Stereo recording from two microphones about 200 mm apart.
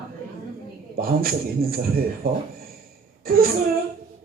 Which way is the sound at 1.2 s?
45° right (ahead or behind).